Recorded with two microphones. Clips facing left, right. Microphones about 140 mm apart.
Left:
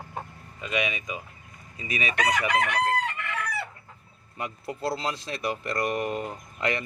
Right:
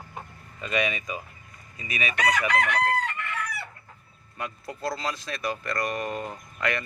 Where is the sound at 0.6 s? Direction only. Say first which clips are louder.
Right 2 dB; 10° left (ahead or behind).